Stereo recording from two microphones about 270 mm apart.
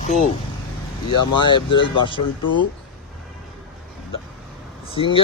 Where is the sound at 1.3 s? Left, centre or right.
Centre.